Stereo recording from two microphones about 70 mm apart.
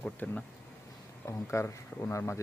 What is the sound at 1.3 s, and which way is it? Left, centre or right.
Speech, left.